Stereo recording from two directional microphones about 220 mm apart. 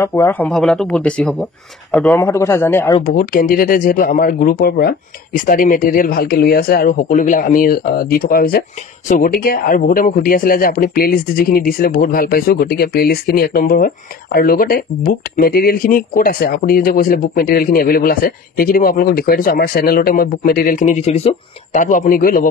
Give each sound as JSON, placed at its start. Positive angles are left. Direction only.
{"t": 0.0, "sound": "speech", "side_deg": 10}
{"t": 2.1, "sound": "a man's voice", "side_deg": 10}
{"t": 3.0, "sound": "speech", "side_deg": 40}